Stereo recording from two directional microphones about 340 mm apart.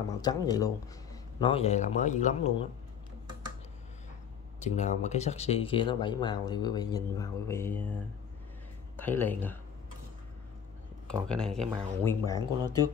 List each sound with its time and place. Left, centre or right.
0.2 s speech: centre
4.6 s speech: left
8.9 s speech: centre
11.2 s speech: centre
12.4 s speech: centre